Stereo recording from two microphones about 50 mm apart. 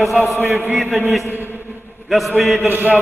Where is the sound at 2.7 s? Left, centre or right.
Right.